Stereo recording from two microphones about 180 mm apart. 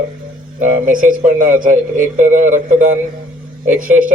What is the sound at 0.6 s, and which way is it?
Speech, 50° right (ahead or behind).